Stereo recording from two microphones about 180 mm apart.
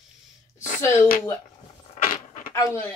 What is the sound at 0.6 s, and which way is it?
Speech, 50° left (ahead or behind).